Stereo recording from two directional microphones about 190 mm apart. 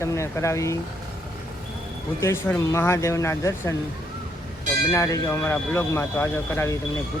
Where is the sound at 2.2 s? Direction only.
15° left (ahead or behind).